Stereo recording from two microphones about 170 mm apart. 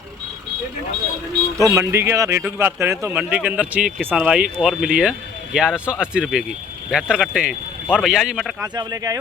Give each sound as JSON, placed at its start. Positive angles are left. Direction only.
{"t": 1.5, "sound": "a man's voice", "side_deg": -15}
{"t": 8.6, "sound": "speech", "side_deg": -25}